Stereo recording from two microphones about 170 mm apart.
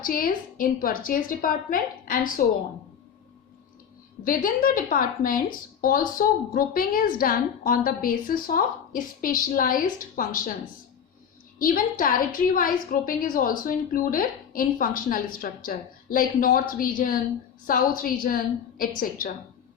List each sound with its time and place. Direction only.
0.0 s speech: 55° left (ahead or behind)
4.2 s speech: 55° left (ahead or behind)
11.6 s speech: 55° left (ahead or behind)